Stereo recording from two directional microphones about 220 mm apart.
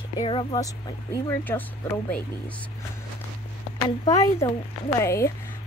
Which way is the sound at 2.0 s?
5° left (ahead or behind).